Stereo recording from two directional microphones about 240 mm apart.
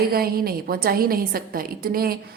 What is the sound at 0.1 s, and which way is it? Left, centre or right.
A woman's voice, right.